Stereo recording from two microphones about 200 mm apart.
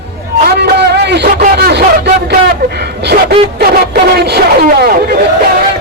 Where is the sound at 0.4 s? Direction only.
55° right (ahead or behind).